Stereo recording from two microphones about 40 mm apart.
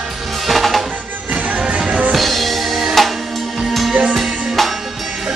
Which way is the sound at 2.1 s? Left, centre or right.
Centre.